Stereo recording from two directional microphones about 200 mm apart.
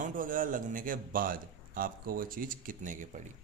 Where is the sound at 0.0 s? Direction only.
40° right (ahead or behind).